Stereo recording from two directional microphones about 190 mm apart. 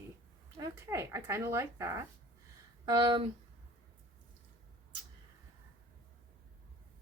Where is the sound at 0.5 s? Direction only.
20° right (ahead or behind).